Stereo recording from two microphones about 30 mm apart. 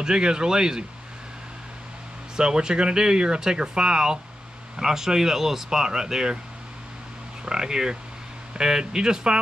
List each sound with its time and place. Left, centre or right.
0.0 s speech: right
2.3 s speech: right
7.4 s speech: right